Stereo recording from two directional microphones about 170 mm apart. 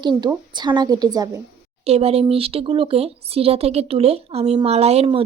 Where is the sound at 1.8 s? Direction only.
35° right (ahead or behind).